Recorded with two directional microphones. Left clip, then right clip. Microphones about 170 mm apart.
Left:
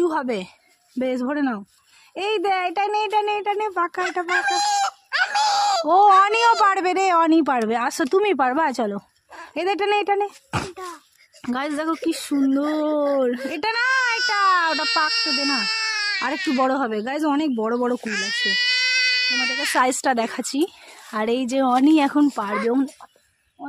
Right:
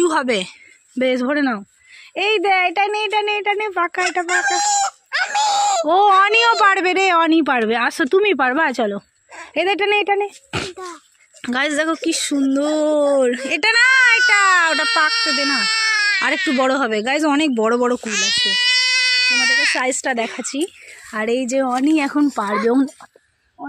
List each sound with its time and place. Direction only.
0.0 s a woman's voice: 10° right (ahead or behind)
4.3 s chicken: 75° right (ahead or behind)
5.9 s a woman's voice: centre (ahead or behind)
11.4 s a woman's voice: centre (ahead or behind)
15.0 s speech: 40° right (ahead or behind)
16.6 s a woman's voice: centre (ahead or behind)
18.0 s speech: 50° right (ahead or behind)
19.7 s a woman's voice: 10° left (ahead or behind)
21.7 s speech: 10° left (ahead or behind)
22.0 s speech: 10° right (ahead or behind)
23.6 s speech: 25° right (ahead or behind)